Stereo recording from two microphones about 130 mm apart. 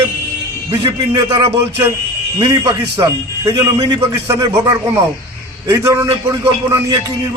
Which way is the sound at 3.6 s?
30° right (ahead or behind).